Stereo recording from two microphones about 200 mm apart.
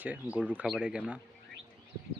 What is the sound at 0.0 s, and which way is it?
Speech, 10° right (ahead or behind).